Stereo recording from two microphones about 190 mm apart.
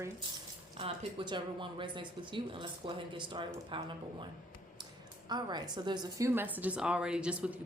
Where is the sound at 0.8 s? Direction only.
25° right (ahead or behind).